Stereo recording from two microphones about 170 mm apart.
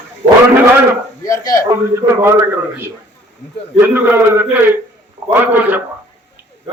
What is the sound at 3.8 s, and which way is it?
A man's voice, 10° right (ahead or behind).